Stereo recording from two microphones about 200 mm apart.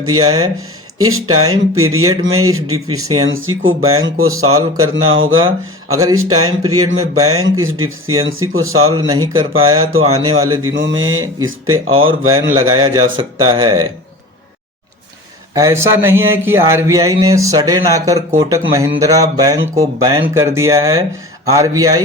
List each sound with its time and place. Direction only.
0.0 s speech: 90° right
9.0 s speech: 20° right (ahead or behind)
10.8 s speech: 70° right (ahead or behind); by 11.9 s 90° right
11.9 s speech: 25° right (ahead or behind)
15.5 s speech: 15° right (ahead or behind)